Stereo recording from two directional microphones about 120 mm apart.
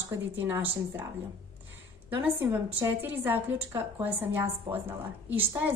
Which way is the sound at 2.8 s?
15° right (ahead or behind).